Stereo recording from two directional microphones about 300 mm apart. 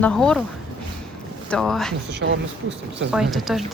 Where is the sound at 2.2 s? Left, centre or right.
Right.